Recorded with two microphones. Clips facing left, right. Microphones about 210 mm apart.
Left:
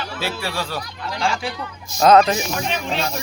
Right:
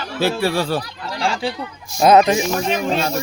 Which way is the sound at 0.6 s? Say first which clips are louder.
Right 5 dB; 30° right (ahead or behind).